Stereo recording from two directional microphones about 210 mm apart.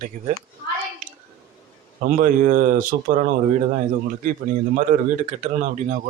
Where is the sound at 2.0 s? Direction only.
40° right (ahead or behind).